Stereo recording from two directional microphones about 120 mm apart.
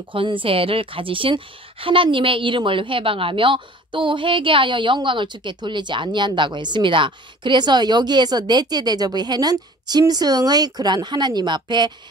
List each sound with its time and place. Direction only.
0.1 s a woman's voice: 45° right (ahead or behind)